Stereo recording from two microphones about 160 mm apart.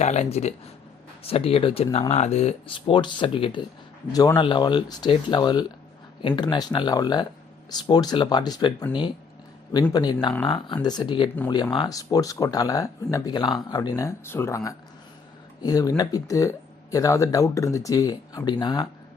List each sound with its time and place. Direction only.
0.0 s speech: 45° left (ahead or behind); by 18.9 s 25° left (ahead or behind)